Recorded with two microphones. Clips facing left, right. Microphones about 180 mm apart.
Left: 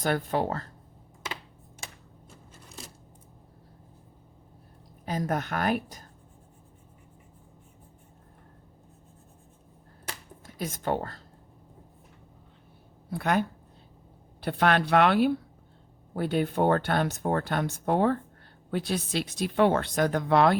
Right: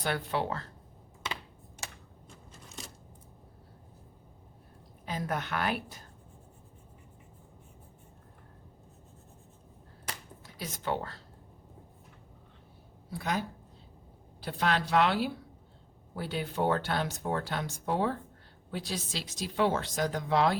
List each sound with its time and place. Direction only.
0.0 s a woman's voice: 45° left (ahead or behind)
5.0 s a woman's voice: 45° left (ahead or behind)
10.4 s speech: 50° left (ahead or behind)
13.1 s speech: 60° left (ahead or behind)
14.4 s speech: 60° left (ahead or behind)